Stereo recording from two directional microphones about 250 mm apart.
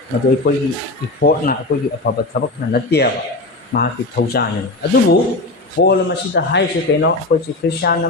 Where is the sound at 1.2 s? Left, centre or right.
Left.